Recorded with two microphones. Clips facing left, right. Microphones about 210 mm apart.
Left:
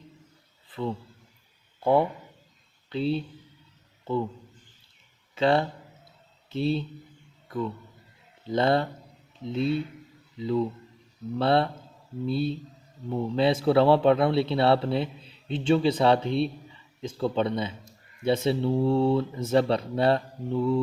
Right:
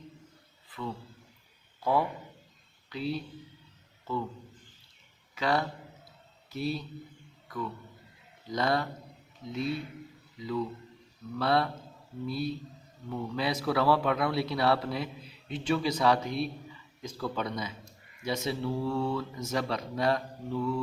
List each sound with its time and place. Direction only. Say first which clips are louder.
0.7 s a man's voice: left 7 dB; 30° left (ahead or behind)
5.3 s a man's voice: left 6 dB; 25° left (ahead or behind)
7.4 s a sound: left 6 dB; 25° left (ahead or behind)
8.4 s a man's voice: left 6 dB; 30° left (ahead or behind)